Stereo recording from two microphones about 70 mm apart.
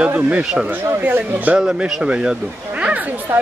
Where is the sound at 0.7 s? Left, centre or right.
Right.